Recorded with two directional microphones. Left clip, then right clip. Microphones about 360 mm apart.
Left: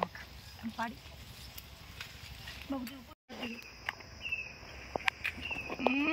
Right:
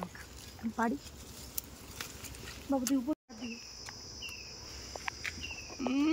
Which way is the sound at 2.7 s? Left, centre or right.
Centre.